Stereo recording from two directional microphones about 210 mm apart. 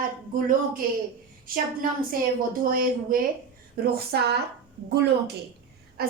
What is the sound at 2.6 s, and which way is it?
A woman's voice, 40° right (ahead or behind).